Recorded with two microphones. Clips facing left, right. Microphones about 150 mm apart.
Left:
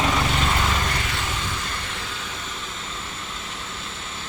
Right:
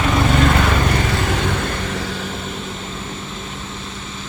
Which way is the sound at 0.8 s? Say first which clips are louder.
Right 9 dB; 50° right (ahead or behind).